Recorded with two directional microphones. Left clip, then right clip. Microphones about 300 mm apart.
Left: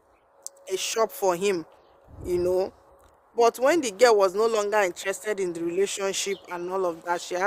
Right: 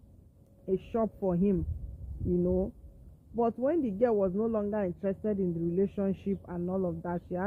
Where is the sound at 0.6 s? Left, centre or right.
Centre.